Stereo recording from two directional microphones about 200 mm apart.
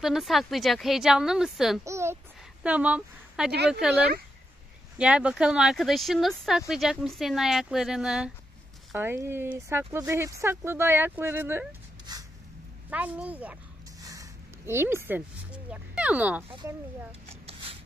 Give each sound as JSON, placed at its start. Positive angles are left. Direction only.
{"t": 0.0, "sound": "speech", "side_deg": 0}
{"t": 1.9, "sound": "a sound", "side_deg": -15}
{"t": 2.6, "sound": "speech", "side_deg": -5}
{"t": 3.5, "sound": "speech", "side_deg": -55}
{"t": 4.9, "sound": "speech", "side_deg": -5}
{"t": 12.1, "sound": "a sound", "side_deg": -20}
{"t": 12.9, "sound": "speech", "side_deg": -5}
{"t": 16.4, "sound": "speech", "side_deg": -25}